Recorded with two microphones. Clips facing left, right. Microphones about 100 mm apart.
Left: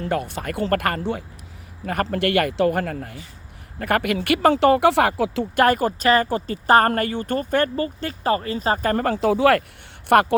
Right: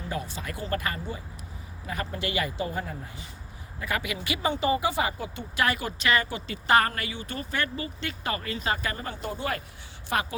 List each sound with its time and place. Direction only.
0.0 s speech: 60° left (ahead or behind)
3.8 s speech: 55° left (ahead or behind); by 5.5 s 90° left
5.5 s a woman's voice: 45° left (ahead or behind)
9.0 s speech: 85° left
10.1 s speech: 65° left (ahead or behind)